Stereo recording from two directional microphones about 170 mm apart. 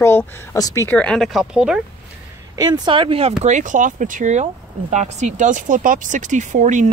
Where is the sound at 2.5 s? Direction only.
25° right (ahead or behind).